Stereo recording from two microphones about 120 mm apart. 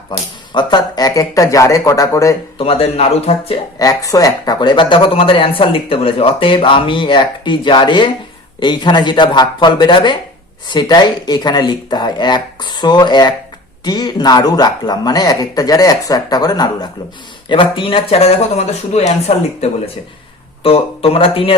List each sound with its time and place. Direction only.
0.5 s speech: 35° left (ahead or behind)
2.6 s speech: 50° left (ahead or behind)
3.8 s speech: 30° left (ahead or behind)
17.5 s speech: 45° left (ahead or behind); by 19.4 s 60° left (ahead or behind)
20.7 s speech: 50° left (ahead or behind)